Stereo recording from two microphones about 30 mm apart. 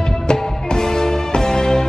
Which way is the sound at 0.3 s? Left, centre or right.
Centre.